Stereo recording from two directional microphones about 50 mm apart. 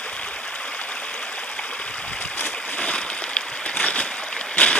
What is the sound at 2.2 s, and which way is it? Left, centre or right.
Boat, left.